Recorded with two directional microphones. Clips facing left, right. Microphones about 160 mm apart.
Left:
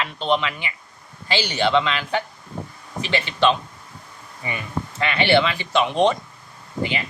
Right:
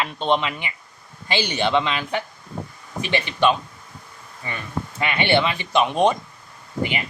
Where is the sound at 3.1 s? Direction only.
15° right (ahead or behind).